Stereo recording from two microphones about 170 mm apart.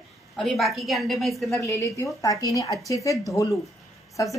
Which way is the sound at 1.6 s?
20° left (ahead or behind).